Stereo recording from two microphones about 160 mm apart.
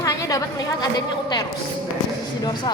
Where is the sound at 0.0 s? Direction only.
20° left (ahead or behind).